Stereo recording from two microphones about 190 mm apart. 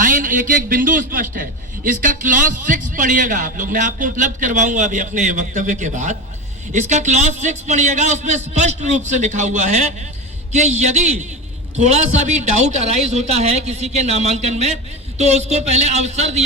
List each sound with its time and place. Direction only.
0.0 s a man's voice: 45° right (ahead or behind)